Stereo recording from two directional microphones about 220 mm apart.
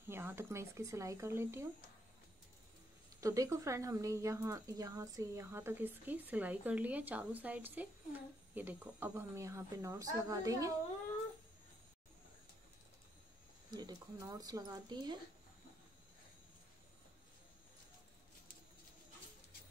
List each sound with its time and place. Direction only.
0.1 s speech: 10° right (ahead or behind)
3.2 s speech: 15° right (ahead or behind)
13.7 s speech: 20° right (ahead or behind)